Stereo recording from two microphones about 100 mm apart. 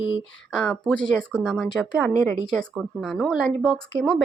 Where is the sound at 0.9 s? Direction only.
5° left (ahead or behind).